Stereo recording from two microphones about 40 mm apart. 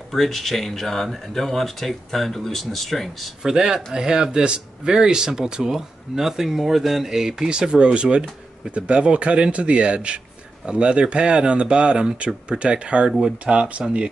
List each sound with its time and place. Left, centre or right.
0.1 s speech: centre
3.4 s a man's voice: centre